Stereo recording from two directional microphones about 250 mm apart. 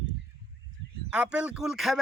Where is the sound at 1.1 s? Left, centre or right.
Centre.